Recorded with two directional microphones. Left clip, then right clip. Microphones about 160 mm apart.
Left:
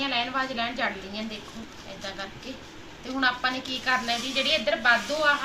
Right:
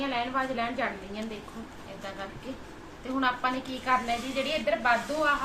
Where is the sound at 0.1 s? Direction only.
25° right (ahead or behind).